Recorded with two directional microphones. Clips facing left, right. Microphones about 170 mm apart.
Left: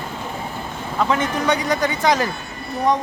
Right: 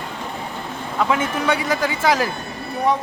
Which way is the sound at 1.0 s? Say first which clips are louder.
Even; 5° right (ahead or behind).